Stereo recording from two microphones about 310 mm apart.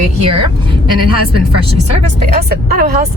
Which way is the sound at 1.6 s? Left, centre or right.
Right.